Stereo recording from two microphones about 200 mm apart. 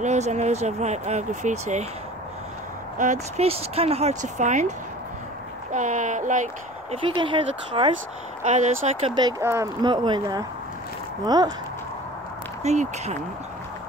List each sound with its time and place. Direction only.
0.0 s speech: 35° right (ahead or behind)
3.0 s speech: 35° right (ahead or behind)
7.1 s speech: 25° right (ahead or behind)
9.0 s speech: 20° right (ahead or behind)
12.6 s speech: 35° right (ahead or behind)